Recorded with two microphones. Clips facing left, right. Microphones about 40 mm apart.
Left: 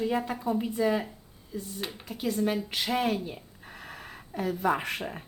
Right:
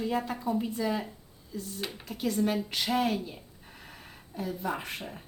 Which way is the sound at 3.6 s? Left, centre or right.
Left.